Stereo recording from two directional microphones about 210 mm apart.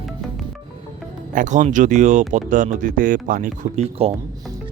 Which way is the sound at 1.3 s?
35° right (ahead or behind).